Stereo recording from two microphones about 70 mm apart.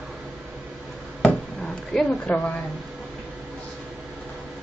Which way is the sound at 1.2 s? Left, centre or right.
Centre.